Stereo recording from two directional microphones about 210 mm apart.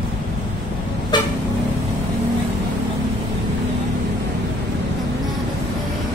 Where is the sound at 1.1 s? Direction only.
20° left (ahead or behind).